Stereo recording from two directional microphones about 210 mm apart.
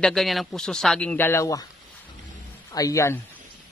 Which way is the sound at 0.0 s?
Centre (ahead or behind).